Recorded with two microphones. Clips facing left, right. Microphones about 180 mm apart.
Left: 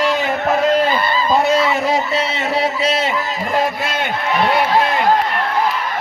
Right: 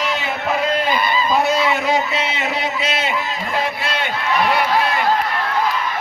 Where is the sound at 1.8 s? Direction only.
35° left (ahead or behind).